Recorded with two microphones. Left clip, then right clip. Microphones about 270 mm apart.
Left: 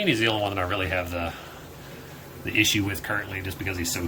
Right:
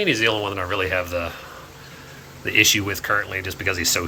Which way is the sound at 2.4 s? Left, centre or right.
Centre.